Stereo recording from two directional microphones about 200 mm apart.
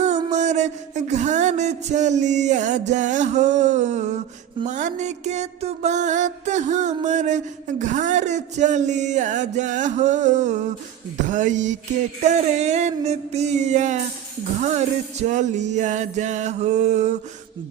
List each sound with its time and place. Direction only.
0.0 s music: 35° right (ahead or behind)